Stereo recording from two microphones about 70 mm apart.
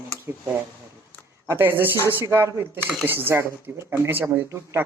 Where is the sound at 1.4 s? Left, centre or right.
Right.